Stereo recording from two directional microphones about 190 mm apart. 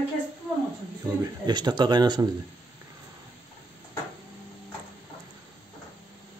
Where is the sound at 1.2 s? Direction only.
20° right (ahead or behind).